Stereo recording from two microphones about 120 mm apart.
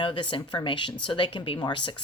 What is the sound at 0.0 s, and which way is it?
Speech, 40° left (ahead or behind).